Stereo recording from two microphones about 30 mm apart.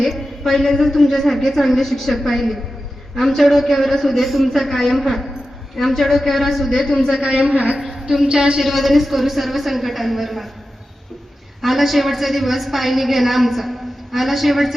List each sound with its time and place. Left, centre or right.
0.0 s a woman's voice: centre
6.8 s a man's voice: centre
7.2 s a woman's voice: right
7.4 s a woman's voice: right
7.8 s a sound: centre
8.2 s speech: centre
8.6 s a woman's voice: centre
11.6 s a woman's voice: centre